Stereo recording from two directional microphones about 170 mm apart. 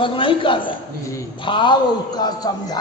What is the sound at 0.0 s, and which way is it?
A man's voice, 30° left (ahead or behind).